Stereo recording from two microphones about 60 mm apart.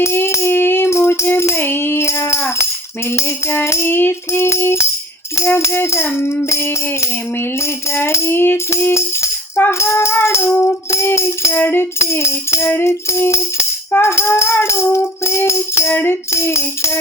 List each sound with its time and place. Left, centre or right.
0.0 s music: left
11.6 s music: left
11.9 s music: left
15.9 s music: left
16.3 s music: left